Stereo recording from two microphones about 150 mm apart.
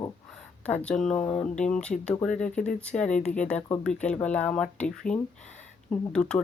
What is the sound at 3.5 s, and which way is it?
Speech, 5° left (ahead or behind).